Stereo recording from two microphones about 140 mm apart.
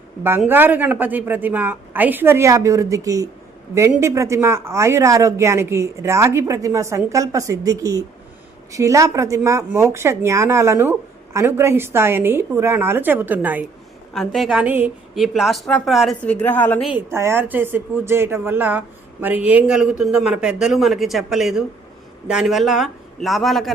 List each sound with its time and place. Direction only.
0.2 s a woman's voice: 15° right (ahead or behind)
14.1 s speech: centre (ahead or behind)
15.1 s speech: centre (ahead or behind)
16.2 s a woman's voice: 10° left (ahead or behind)
16.9 s speech: 20° right (ahead or behind); by 23.7 s centre (ahead or behind)